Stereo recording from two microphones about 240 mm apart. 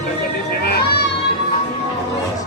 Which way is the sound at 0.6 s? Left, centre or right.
Left.